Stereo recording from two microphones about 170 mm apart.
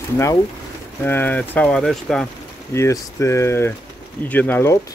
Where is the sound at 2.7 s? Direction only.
15° left (ahead or behind).